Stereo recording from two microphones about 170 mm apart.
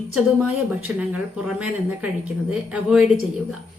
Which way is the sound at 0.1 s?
5° right (ahead or behind).